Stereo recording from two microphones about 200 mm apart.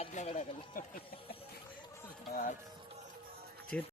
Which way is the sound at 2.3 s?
40° left (ahead or behind).